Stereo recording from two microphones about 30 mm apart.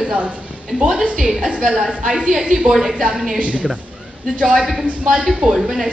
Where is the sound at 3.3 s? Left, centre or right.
Right.